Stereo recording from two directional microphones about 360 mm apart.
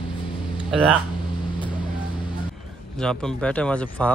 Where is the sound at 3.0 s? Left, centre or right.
Centre.